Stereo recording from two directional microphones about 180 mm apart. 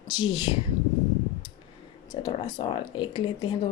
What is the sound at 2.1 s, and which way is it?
A woman's voice, 25° left (ahead or behind).